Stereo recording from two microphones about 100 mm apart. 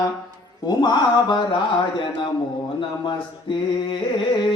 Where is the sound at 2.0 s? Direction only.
55° left (ahead or behind).